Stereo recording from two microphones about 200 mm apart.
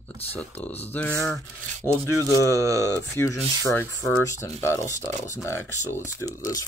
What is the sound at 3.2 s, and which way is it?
Speech, 15° left (ahead or behind).